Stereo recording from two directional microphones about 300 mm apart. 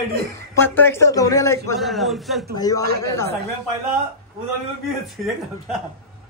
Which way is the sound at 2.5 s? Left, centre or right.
Centre.